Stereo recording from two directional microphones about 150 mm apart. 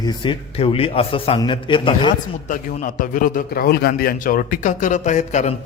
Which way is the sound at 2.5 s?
60° left (ahead or behind).